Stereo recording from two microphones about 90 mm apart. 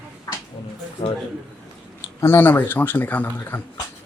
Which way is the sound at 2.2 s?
25° left (ahead or behind).